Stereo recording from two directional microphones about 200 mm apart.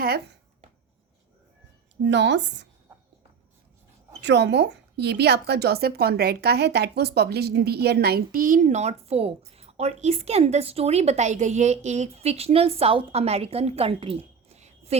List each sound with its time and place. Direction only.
0.0 s speech: 50° right (ahead or behind)
2.0 s speech: 60° right (ahead or behind)
4.2 s a woman's voice: 60° right (ahead or behind); by 14.9 s 30° right (ahead or behind)